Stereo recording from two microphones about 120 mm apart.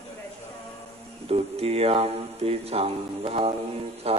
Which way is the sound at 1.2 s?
55° right (ahead or behind).